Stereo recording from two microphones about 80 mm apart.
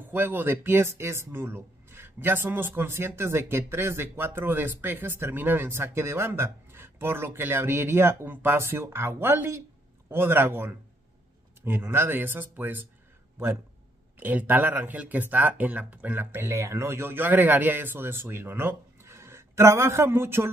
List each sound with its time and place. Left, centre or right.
0.0 s speech: right
14.2 s speech: right